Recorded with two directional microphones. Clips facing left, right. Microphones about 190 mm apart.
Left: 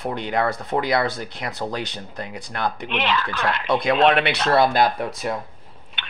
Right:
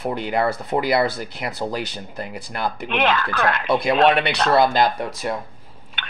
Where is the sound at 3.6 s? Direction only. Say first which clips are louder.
Even; 5° right (ahead or behind).